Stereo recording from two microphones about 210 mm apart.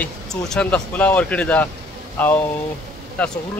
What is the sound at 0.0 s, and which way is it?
Speech, centre (ahead or behind).